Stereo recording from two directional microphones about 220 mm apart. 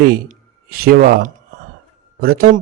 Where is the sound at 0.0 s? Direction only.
40° right (ahead or behind).